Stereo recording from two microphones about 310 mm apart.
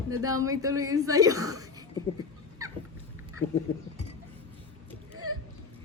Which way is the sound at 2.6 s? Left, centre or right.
Centre.